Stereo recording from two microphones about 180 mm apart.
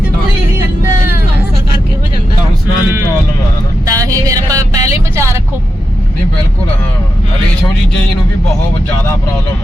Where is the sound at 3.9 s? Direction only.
20° right (ahead or behind).